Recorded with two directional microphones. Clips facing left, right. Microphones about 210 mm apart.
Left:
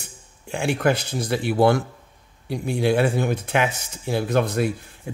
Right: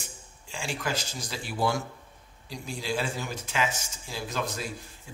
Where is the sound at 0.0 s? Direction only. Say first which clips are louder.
Left 4 dB; 60° left (ahead or behind).